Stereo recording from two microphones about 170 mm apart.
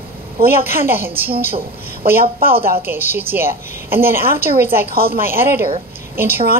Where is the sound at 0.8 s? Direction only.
10° right (ahead or behind).